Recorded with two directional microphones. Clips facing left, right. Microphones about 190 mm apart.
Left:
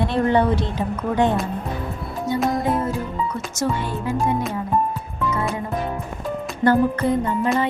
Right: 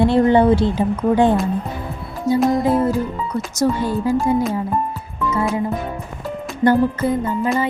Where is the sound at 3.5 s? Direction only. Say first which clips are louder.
Right 6 dB; 35° right (ahead or behind).